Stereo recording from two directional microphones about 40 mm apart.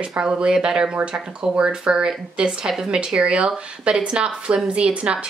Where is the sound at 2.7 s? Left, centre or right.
Centre.